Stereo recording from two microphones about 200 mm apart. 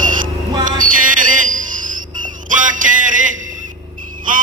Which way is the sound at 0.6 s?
40° right (ahead or behind).